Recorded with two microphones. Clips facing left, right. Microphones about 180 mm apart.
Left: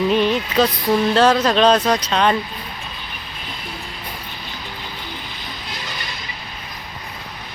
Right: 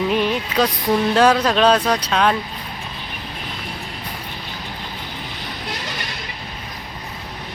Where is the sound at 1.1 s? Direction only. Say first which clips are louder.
Even; 10° right (ahead or behind).